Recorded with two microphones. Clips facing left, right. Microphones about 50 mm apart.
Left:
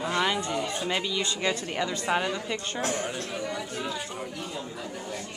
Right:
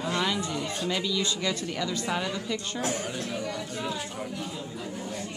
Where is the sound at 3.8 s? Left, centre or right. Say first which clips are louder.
Even; centre.